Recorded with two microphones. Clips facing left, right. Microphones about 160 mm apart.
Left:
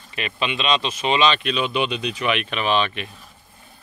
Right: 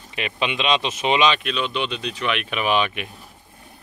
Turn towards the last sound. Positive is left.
turn(degrees=-10)  # may be behind; listen again after turning